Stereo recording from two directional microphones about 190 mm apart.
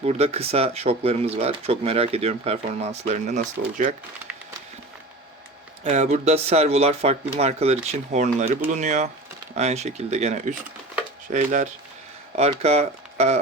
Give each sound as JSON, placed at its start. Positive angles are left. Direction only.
{"t": 0.0, "sound": "speech", "side_deg": -35}
{"t": 5.8, "sound": "speech", "side_deg": -35}